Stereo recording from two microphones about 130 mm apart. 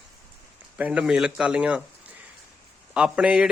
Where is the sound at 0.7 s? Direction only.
10° right (ahead or behind).